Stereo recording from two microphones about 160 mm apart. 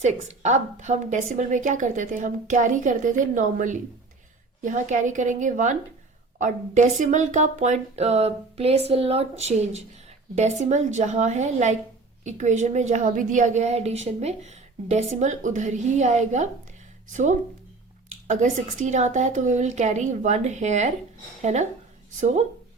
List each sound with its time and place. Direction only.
0.0 s a woman's voice: 50° right (ahead or behind)